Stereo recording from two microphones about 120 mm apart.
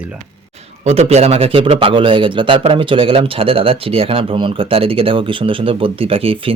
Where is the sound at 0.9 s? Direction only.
60° right (ahead or behind).